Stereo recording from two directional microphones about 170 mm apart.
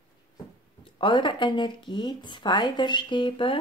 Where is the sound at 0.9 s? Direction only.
30° left (ahead or behind).